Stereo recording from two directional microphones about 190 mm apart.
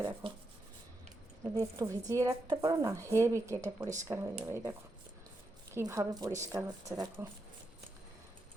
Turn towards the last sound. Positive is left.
turn(degrees=-20)  # may be behind; listen again after turning